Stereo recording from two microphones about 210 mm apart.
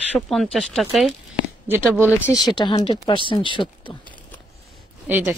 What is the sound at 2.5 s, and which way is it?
Speech, 20° left (ahead or behind).